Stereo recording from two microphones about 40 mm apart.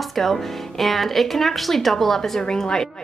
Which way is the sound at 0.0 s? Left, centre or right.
Centre.